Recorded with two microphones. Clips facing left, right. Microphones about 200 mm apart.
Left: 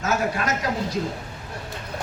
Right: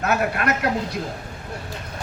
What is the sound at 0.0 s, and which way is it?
Speech, 60° right (ahead or behind).